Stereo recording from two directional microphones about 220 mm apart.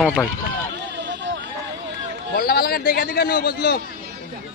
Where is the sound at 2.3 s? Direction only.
45° left (ahead or behind).